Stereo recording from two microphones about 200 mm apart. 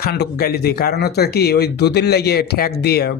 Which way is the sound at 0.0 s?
50° left (ahead or behind).